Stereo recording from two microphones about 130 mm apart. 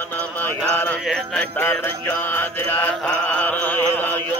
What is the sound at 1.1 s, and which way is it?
Music, 15° left (ahead or behind).